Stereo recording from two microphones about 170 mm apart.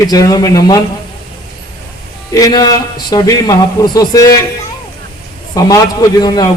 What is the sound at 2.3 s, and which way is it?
A man's voice, 20° left (ahead or behind).